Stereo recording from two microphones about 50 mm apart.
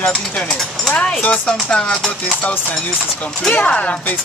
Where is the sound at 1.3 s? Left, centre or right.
Left.